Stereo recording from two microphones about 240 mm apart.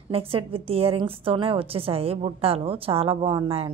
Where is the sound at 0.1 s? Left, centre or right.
Right.